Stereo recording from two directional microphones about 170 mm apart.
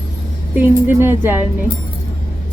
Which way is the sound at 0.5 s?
10° right (ahead or behind).